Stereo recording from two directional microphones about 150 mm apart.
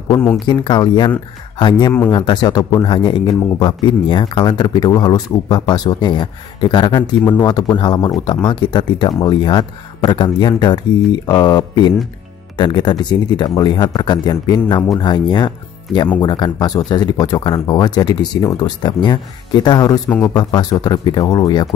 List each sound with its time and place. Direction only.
0.1 s speech: 15° left (ahead or behind)
0.5 s speech: 30° left (ahead or behind)